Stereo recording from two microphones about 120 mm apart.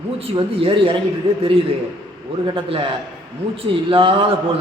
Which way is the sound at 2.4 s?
45° right (ahead or behind).